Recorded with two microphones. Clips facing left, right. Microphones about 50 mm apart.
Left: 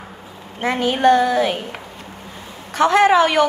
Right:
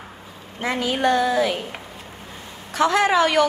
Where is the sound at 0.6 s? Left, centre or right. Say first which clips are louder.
Left 4 dB; left.